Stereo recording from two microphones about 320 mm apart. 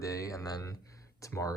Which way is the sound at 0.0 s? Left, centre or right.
Centre.